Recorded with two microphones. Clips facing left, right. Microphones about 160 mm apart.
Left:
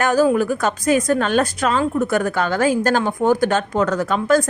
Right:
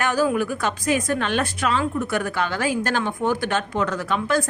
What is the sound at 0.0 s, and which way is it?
A woman's voice, 40° left (ahead or behind).